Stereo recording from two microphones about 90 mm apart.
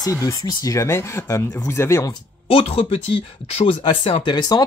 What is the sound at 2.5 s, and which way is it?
Speech, 90° left.